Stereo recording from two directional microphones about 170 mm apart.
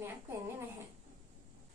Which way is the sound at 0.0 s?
15° right (ahead or behind).